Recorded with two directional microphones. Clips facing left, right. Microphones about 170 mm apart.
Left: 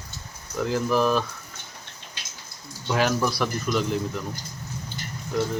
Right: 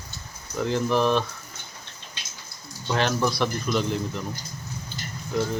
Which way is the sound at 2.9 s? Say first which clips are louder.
Left 1 dB; 5° left (ahead or behind).